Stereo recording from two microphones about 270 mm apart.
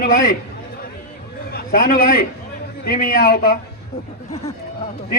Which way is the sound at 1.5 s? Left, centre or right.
Left.